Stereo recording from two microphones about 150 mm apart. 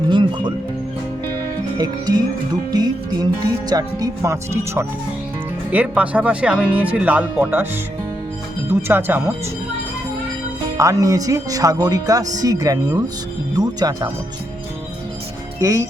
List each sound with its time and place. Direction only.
0.1 s music: 35° right (ahead or behind)
1.8 s speech: 25° right (ahead or behind)
8.7 s speech: 15° right (ahead or behind)
10.8 s speech: 20° right (ahead or behind)
15.6 s speech: 20° right (ahead or behind)